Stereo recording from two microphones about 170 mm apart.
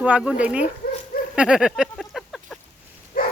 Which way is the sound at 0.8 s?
60° left (ahead or behind).